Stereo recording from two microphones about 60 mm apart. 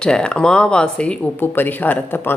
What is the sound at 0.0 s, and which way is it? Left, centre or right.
Speech, centre.